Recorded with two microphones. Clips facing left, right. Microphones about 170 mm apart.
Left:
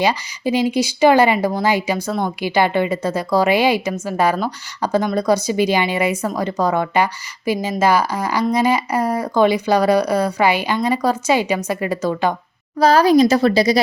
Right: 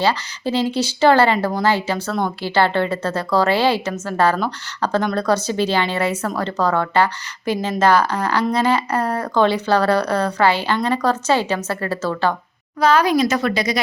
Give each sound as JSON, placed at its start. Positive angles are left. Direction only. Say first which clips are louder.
{"t": 0.0, "sound": "speech", "louder": "left 1 dB", "side_deg": 15}
{"t": 12.8, "sound": "speech", "louder": "left 4 dB", "side_deg": 35}